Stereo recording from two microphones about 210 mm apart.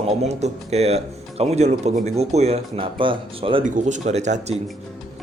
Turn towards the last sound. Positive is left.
turn(degrees=-35)  # may be behind; listen again after turning